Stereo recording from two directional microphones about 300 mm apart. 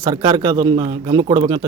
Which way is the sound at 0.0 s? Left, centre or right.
Centre.